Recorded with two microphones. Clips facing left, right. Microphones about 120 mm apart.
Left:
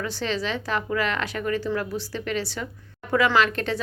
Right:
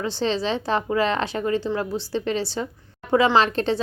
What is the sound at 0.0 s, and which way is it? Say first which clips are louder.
A woman's voice: right 4 dB; 25° right (ahead or behind).